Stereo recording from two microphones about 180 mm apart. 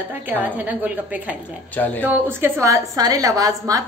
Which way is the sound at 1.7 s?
10° left (ahead or behind).